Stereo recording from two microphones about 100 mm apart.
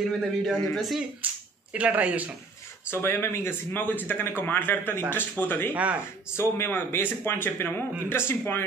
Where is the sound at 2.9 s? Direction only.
25° left (ahead or behind).